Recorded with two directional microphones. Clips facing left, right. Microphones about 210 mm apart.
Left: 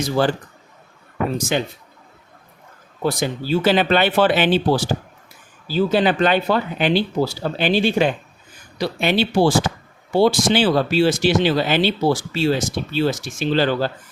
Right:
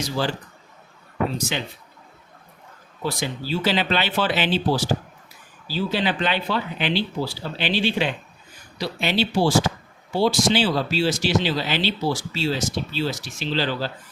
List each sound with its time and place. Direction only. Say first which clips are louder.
0.0 s speech: left 6 dB; 55° left (ahead or behind)
3.0 s speech: left 6 dB; 50° left (ahead or behind)